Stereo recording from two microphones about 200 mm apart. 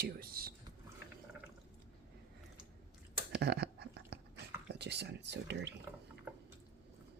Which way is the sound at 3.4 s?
55° right (ahead or behind).